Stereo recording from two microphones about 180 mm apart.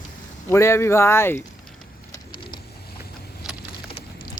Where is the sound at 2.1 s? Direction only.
25° left (ahead or behind).